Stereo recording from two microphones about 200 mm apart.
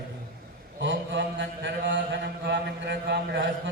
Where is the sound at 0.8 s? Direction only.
65° right (ahead or behind).